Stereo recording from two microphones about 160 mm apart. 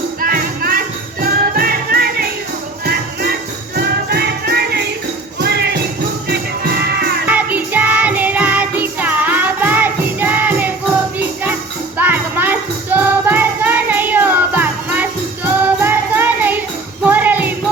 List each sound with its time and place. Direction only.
0.2 s music: 65° right (ahead or behind); by 7.2 s 90° right
7.3 s music: 10° right (ahead or behind)
11.9 s music: 10° right (ahead or behind)